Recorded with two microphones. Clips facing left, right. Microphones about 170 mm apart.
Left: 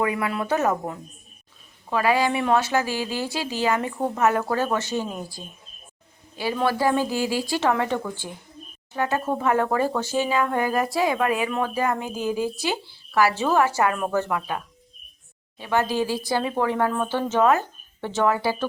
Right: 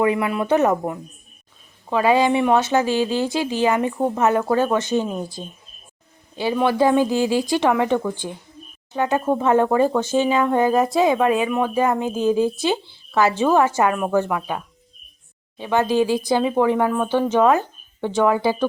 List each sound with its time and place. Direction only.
0.0 s speech: 20° right (ahead or behind)